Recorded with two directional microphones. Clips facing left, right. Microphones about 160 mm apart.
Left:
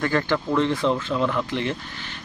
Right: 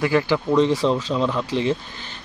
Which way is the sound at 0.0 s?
10° right (ahead or behind).